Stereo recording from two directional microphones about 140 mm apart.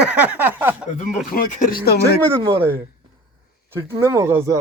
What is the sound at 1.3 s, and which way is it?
Speech, 80° left.